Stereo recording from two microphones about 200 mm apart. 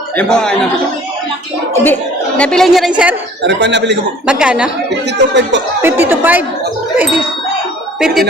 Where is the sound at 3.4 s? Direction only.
60° right (ahead or behind).